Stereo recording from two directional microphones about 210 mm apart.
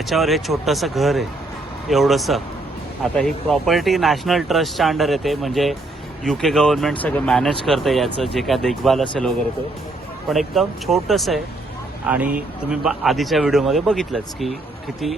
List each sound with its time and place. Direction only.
0.1 s speech: centre (ahead or behind)